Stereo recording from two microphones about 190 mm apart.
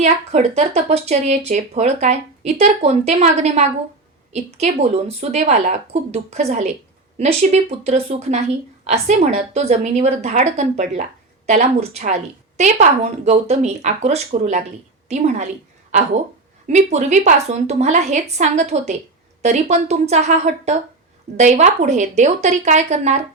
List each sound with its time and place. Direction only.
0.0 s a woman's voice: 35° right (ahead or behind)